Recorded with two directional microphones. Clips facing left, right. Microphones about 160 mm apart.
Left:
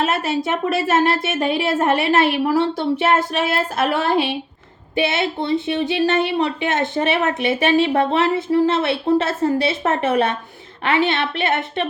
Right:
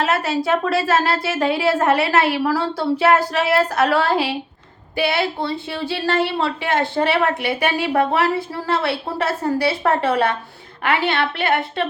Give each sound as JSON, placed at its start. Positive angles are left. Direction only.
{"t": 0.0, "sound": "a woman's voice", "side_deg": 20}